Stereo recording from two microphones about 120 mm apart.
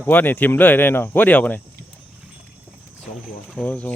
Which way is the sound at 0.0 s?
15° left (ahead or behind).